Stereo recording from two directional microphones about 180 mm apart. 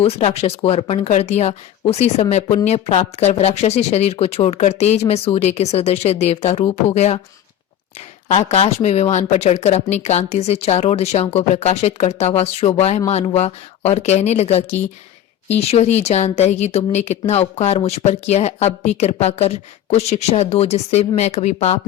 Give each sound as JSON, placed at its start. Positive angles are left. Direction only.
{"t": 0.0, "sound": "speech", "side_deg": 35}
{"t": 8.3, "sound": "speech", "side_deg": 40}